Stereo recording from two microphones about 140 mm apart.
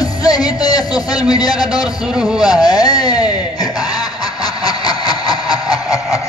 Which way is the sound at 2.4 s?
30° left (ahead or behind).